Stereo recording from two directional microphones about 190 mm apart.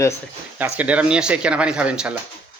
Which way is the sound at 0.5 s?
10° right (ahead or behind).